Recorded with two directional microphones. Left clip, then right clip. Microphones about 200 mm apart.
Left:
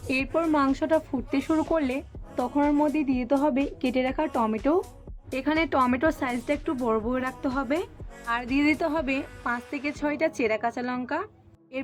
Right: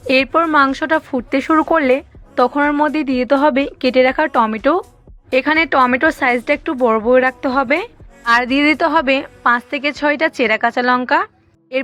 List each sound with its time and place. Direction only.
0.1 s a woman's voice: 25° right (ahead or behind)